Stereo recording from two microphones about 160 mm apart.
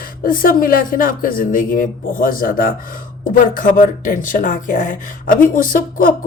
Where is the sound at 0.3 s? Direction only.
60° left (ahead or behind).